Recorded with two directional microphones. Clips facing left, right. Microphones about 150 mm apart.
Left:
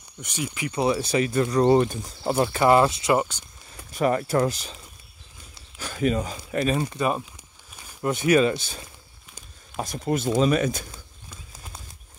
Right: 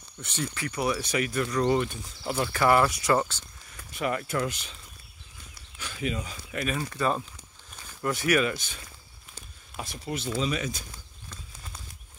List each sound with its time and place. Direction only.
0.2 s speech: 10° left (ahead or behind)
0.7 s speech: 25° left (ahead or behind)
3.9 s speech: 40° left (ahead or behind)
5.8 s speech: 45° left (ahead or behind)
6.8 s speech: 15° left (ahead or behind); by 8.8 s 35° left (ahead or behind)
9.8 s speech: 45° left (ahead or behind)